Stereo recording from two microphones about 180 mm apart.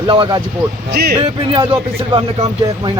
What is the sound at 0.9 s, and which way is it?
Speech, 60° right (ahead or behind).